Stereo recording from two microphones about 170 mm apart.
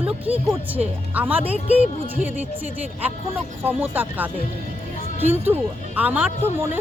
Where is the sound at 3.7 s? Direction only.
10° right (ahead or behind).